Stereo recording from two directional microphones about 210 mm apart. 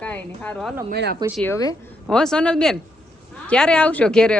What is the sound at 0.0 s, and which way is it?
Speech, 5° left (ahead or behind).